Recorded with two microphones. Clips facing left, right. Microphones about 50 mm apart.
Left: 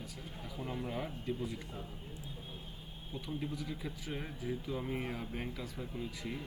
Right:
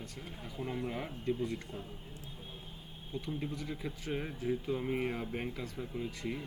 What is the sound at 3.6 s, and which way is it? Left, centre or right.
A man's voice, centre.